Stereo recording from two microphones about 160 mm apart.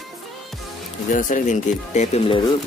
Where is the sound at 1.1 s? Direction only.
55° left (ahead or behind).